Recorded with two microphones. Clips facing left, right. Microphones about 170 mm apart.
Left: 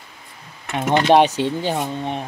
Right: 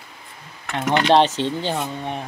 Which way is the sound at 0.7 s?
20° left (ahead or behind).